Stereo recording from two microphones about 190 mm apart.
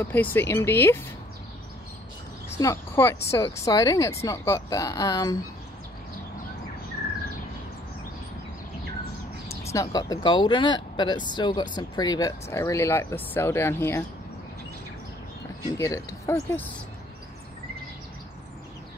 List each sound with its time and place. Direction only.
0.0 s speech: 10° left (ahead or behind)
2.5 s speech: 15° left (ahead or behind)
9.7 s speech: 15° left (ahead or behind)
15.8 s speech: 15° left (ahead or behind)